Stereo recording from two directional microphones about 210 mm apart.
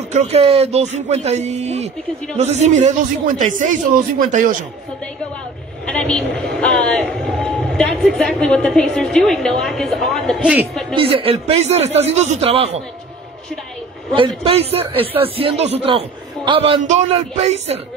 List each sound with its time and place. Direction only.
0.1 s speech: 30° right (ahead or behind)
5.9 s a man's voice: 5° left (ahead or behind)
11.0 s a man's voice: 25° right (ahead or behind)
14.1 s a man's voice: 25° right (ahead or behind)